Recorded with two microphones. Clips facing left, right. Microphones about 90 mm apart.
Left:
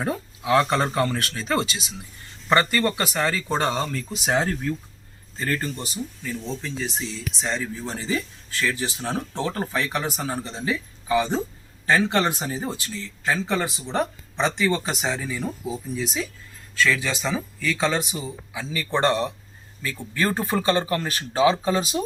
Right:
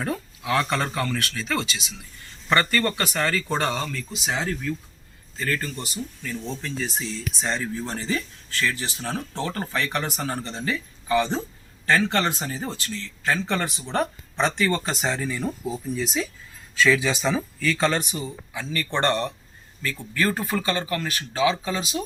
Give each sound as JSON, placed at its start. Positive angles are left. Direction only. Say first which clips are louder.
{"t": 0.0, "sound": "speech", "louder": "left 2 dB", "side_deg": 20}
{"t": 2.6, "sound": "speech", "louder": "even", "side_deg": 15}
{"t": 4.1, "sound": "speech", "louder": "left 5 dB", "side_deg": 40}
{"t": 5.4, "sound": "speech", "louder": "left 1 dB", "side_deg": 25}
{"t": 6.2, "sound": "speech", "louder": "even", "side_deg": 0}
{"t": 19.8, "sound": "speech", "louder": "even", "side_deg": 20}